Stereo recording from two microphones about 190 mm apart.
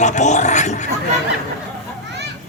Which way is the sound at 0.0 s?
40° left (ahead or behind).